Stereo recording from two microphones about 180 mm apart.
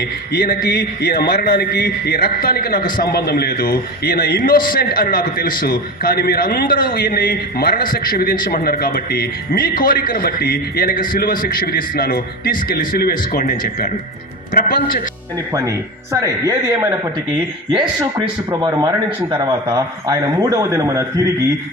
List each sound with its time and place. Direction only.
0.3 s a man's voice: 55° left (ahead or behind)
16.2 s a man's voice: 20° right (ahead or behind)
18.6 s a man's voice: 25° right (ahead or behind)